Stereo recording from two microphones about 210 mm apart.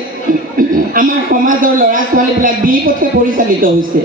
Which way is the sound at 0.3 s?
40° right (ahead or behind).